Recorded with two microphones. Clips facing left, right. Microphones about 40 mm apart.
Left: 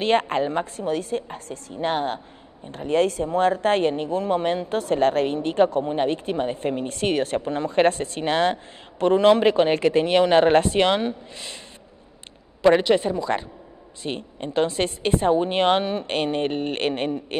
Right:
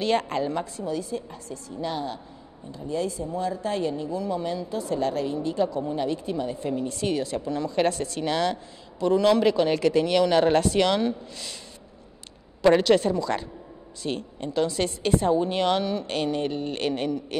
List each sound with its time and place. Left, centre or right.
0.0 s a woman's voice: left
0.8 s speech: left
2.7 s a woman's voice: left
12.6 s a woman's voice: centre; by 17.4 s left